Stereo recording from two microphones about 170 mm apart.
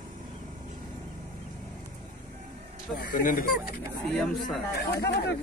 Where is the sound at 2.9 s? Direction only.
55° left (ahead or behind).